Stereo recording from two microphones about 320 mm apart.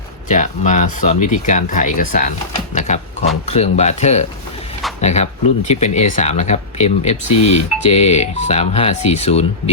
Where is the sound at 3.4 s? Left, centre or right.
Centre.